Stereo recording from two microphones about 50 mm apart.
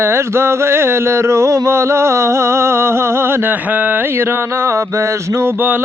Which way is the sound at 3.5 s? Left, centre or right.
Right.